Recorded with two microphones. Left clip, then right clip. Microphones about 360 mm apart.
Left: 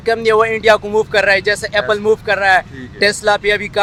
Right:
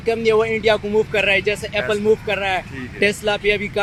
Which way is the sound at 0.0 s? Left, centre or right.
Left.